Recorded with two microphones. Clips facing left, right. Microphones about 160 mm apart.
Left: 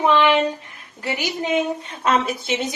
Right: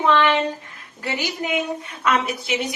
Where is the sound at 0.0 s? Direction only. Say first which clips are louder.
Left 1 dB; 15° left (ahead or behind).